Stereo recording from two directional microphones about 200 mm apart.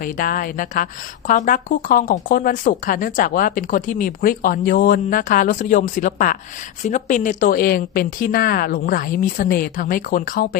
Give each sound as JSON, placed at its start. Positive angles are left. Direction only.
{"t": 0.0, "sound": "speech", "side_deg": 45}